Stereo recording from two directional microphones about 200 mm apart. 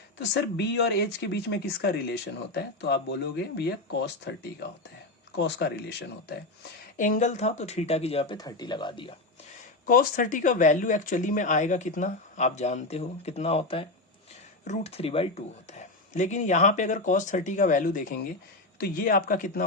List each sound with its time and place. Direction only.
0.3 s speech: 55° left (ahead or behind)
6.9 s speech: 40° left (ahead or behind); by 9.1 s 25° left (ahead or behind)
9.8 s speech: 45° left (ahead or behind)